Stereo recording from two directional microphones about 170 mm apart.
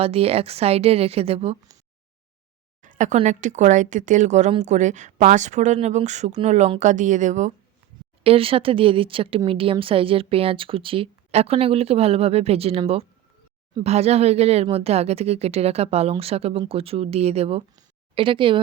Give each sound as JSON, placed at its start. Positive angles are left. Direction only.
{"t": 0.0, "sound": "a woman's voice", "side_deg": -35}
{"t": 2.8, "sound": "a sound", "side_deg": -50}
{"t": 3.2, "sound": "speech", "side_deg": -45}
{"t": 8.2, "sound": "a woman's voice", "side_deg": -35}
{"t": 13.8, "sound": "a woman's voice", "side_deg": -40}
{"t": 17.7, "sound": "a sound", "side_deg": -30}